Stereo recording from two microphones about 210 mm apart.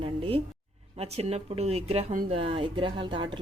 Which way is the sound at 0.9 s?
30° right (ahead or behind).